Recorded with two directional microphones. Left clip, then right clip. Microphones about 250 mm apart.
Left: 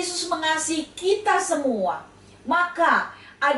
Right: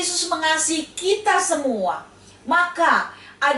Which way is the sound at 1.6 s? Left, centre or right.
Left.